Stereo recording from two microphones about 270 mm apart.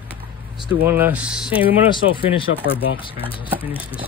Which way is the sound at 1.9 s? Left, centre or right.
Centre.